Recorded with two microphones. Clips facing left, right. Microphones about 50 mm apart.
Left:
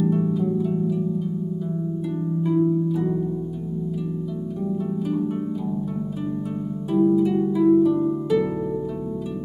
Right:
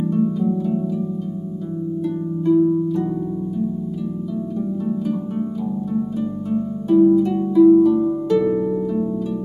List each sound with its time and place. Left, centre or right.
0.1 s harp: centre
2.4 s harp: centre
4.8 s harp: centre
6.5 s harp: centre